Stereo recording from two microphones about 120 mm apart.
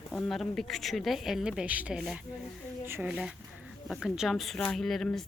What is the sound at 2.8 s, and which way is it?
Speech, 20° right (ahead or behind).